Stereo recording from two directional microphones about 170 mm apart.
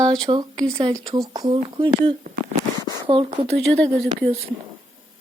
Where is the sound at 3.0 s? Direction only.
30° right (ahead or behind).